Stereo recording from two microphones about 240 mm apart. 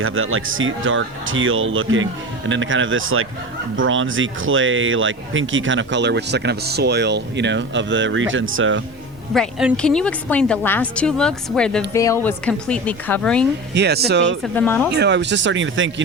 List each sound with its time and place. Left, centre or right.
0.0 s speech: right
9.3 s a woman's voice: centre
13.7 s speech: right
14.4 s a woman's voice: centre
14.9 s speech: right